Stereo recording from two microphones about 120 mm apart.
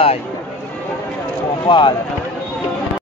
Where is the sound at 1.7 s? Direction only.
40° left (ahead or behind).